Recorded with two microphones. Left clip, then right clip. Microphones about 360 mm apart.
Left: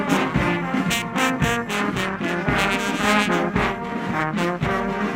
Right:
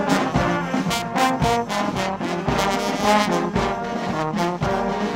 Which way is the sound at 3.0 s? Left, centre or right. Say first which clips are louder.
Right 2 dB; right.